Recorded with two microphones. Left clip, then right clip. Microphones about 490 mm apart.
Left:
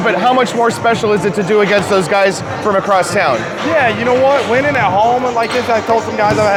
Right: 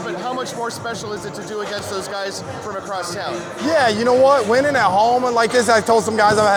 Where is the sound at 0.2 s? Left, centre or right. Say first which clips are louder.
Left 13 dB; left.